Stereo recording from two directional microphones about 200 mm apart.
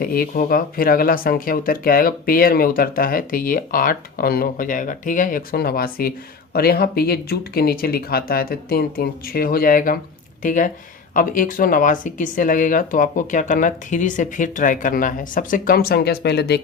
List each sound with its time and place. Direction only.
0.0 s speech: 45° left (ahead or behind)